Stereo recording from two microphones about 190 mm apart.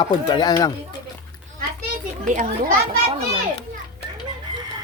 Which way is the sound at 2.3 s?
40° right (ahead or behind).